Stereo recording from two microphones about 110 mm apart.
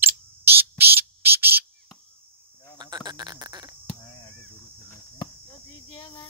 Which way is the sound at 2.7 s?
40° right (ahead or behind).